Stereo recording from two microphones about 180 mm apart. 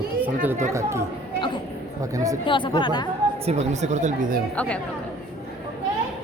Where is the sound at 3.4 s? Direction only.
40° right (ahead or behind).